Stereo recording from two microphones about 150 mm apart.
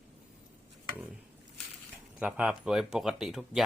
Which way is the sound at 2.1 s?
5° right (ahead or behind).